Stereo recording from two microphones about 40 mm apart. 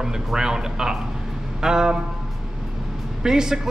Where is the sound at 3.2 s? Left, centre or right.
Centre.